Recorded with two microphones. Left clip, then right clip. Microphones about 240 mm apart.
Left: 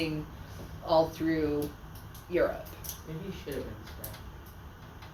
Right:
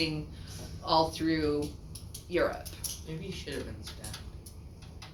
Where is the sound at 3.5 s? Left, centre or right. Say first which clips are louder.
Left 2 dB; right.